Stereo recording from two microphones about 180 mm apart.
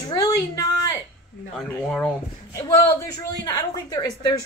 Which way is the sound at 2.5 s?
15° left (ahead or behind).